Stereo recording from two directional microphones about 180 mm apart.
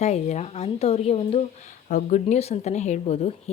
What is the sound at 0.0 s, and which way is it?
A woman's voice, 40° left (ahead or behind).